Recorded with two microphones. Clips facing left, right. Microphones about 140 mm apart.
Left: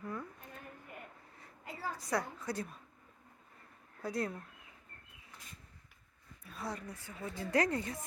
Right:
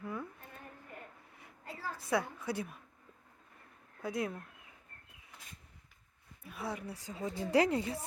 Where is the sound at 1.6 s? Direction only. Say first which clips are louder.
Left 1 dB; 15° left (ahead or behind).